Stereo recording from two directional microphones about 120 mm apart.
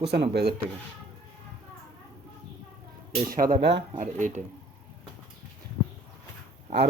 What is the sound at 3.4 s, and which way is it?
Speech, 30° right (ahead or behind).